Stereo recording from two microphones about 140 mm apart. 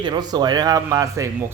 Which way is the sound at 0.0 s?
30° right (ahead or behind).